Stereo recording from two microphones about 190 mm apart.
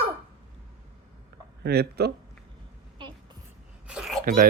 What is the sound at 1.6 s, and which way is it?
Speech, 55° right (ahead or behind).